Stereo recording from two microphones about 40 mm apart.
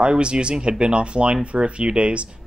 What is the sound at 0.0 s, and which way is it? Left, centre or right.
Speech, right.